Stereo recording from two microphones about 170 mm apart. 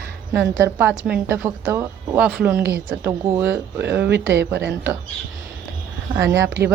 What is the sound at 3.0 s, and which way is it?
Speech, 15° right (ahead or behind).